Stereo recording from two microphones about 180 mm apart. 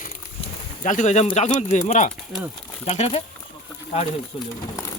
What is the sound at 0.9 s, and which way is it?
Speech, 45° left (ahead or behind).